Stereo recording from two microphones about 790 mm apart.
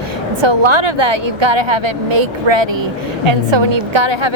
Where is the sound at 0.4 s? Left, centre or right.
Right.